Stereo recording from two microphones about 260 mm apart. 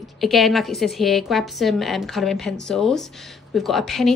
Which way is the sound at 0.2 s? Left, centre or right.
Centre.